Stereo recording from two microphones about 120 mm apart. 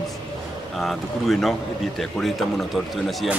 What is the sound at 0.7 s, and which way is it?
A man's voice, centre (ahead or behind).